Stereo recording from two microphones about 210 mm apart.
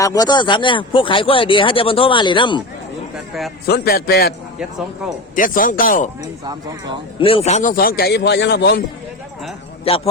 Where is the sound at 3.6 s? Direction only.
50° left (ahead or behind).